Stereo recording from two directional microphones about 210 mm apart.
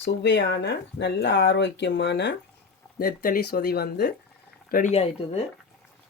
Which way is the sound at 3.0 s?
45° left (ahead or behind).